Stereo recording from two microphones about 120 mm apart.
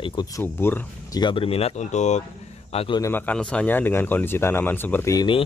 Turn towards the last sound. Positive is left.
turn(degrees=40)  # may be behind; listen again after turning